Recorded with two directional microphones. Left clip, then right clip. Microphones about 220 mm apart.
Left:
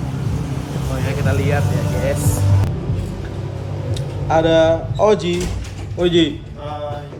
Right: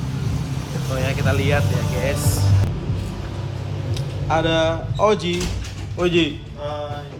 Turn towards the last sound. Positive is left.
turn(degrees=0)  # may be behind; listen again after turning